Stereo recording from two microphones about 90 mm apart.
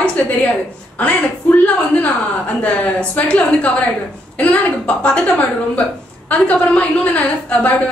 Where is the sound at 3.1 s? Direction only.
15° left (ahead or behind).